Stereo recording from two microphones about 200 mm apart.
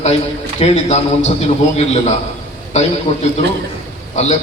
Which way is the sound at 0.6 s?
30° left (ahead or behind).